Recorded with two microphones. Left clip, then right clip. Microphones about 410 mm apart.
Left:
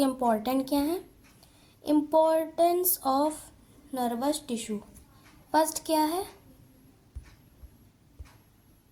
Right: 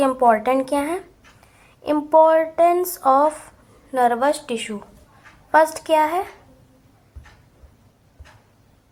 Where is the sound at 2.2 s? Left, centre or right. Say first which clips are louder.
Right 9 dB; left.